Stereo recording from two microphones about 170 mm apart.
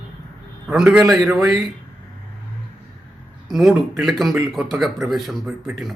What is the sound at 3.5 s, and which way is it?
Speech, centre (ahead or behind).